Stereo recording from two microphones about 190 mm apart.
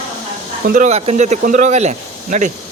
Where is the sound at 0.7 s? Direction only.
40° right (ahead or behind).